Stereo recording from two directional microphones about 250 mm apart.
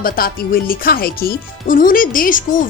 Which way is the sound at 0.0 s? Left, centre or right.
Left.